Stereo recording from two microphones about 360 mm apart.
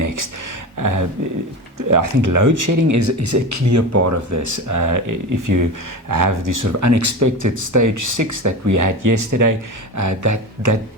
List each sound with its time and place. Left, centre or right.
0.8 s speech: right